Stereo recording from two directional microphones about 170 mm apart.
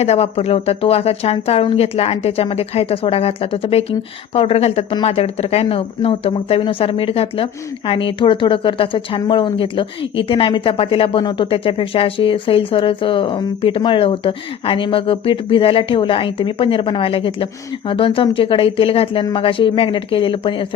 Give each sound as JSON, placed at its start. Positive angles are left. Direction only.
{"t": 0.0, "sound": "speech", "side_deg": 40}